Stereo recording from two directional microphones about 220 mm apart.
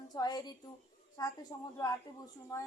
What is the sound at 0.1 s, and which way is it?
A woman's voice, 20° left (ahead or behind).